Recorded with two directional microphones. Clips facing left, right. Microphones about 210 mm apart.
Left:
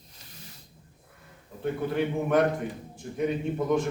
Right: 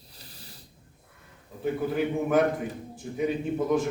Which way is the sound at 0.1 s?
35° right (ahead or behind).